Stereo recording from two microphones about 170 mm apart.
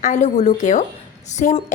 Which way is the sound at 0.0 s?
45° left (ahead or behind).